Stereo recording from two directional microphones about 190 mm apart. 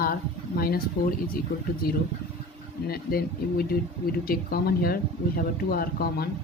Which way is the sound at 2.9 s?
50° left (ahead or behind).